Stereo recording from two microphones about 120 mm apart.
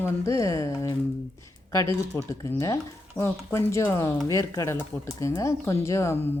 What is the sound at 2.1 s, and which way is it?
Speech, 25° left (ahead or behind).